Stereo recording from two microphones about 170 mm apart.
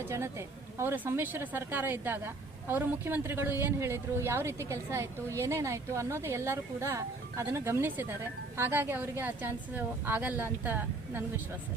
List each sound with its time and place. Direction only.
0.0 s speech: 15° right (ahead or behind)